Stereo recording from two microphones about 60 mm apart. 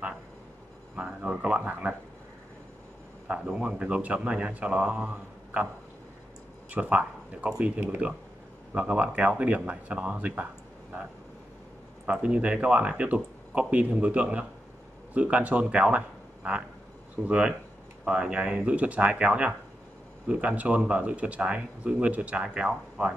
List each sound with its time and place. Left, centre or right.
0.9 s speech: centre
3.3 s speech: centre
6.7 s speech: right
12.1 s speech: centre